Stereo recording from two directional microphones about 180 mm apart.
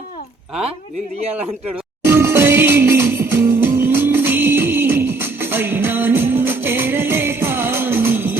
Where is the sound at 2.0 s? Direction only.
15° right (ahead or behind).